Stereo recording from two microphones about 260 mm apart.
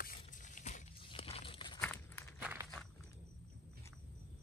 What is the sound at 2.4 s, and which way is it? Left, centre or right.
Walk, centre.